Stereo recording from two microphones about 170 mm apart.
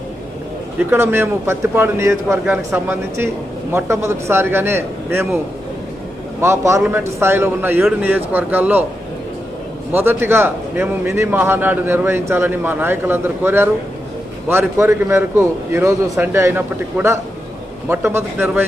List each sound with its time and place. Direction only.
0.8 s a man's voice: 15° right (ahead or behind)
6.4 s a man's voice: 15° right (ahead or behind)
9.9 s a man's voice: 10° right (ahead or behind)